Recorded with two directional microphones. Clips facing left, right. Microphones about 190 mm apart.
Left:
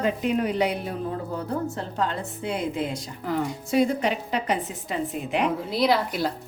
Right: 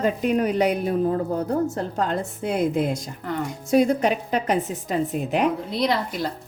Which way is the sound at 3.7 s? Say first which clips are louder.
Right 4 dB; 45° right (ahead or behind).